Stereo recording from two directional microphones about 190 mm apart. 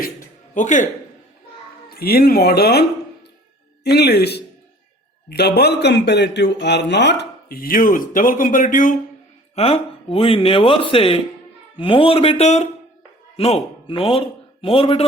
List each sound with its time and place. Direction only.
0.5 s a man's voice: 40° left (ahead or behind)
1.9 s a man's voice: 55° left (ahead or behind)
3.8 s a man's voice: 60° left (ahead or behind); by 9.0 s 45° left (ahead or behind)
9.6 s speech: 30° left (ahead or behind)